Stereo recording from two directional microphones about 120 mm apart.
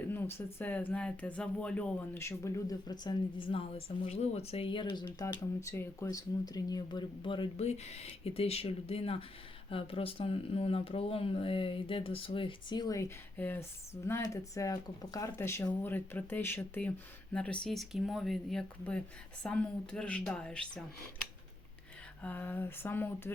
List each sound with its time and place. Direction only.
0.1 s speech: 20° left (ahead or behind); by 5.1 s 40° left (ahead or behind)
5.2 s speech: 25° left (ahead or behind); by 7.5 s 45° left (ahead or behind)
7.5 s speech: 60° left (ahead or behind); by 23.3 s 20° left (ahead or behind)